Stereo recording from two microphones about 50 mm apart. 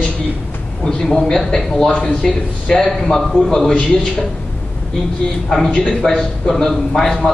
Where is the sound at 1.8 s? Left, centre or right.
Centre.